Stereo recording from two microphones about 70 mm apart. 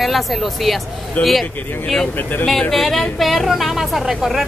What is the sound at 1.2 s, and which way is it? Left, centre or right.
Speech, left.